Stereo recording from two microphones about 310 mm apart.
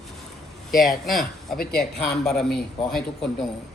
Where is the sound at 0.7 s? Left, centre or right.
Centre.